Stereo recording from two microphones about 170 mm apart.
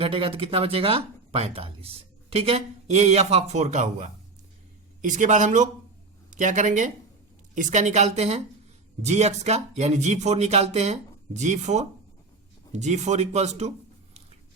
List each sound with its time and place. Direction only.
0.0 s speech: 30° right (ahead or behind)
5.0 s speech: 45° right (ahead or behind)